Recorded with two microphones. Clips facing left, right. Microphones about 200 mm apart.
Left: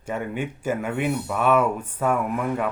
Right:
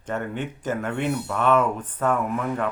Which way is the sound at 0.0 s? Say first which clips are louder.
Left 1 dB; 10° left (ahead or behind).